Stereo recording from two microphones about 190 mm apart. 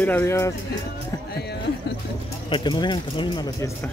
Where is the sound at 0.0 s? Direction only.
10° left (ahead or behind).